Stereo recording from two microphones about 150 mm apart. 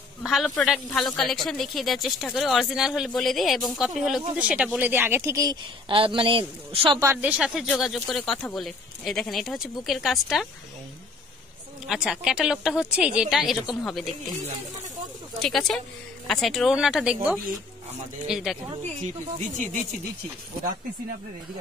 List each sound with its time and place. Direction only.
0.2 s a man's voice: centre (ahead or behind); by 5.6 s 20° right (ahead or behind)
5.9 s speech: 35° right (ahead or behind)
7.0 s a man's voice: 15° right (ahead or behind)
11.9 s a man's voice: 5° right (ahead or behind)
15.3 s a man's voice: centre (ahead or behind)
19.5 s speech: 60° right (ahead or behind)